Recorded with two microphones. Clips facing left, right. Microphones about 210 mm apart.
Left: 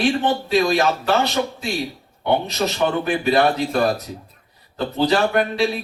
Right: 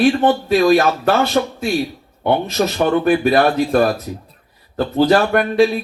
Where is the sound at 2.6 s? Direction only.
55° right (ahead or behind).